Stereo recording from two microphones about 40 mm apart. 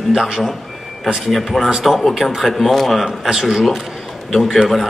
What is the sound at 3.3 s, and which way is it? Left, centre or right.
A man's voice, centre.